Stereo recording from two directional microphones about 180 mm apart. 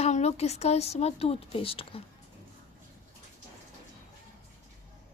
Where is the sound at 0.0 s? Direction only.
35° left (ahead or behind).